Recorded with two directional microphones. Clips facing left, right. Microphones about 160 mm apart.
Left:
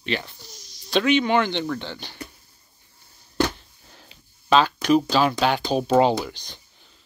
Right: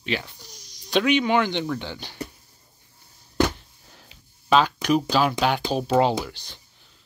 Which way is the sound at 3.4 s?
5° right (ahead or behind).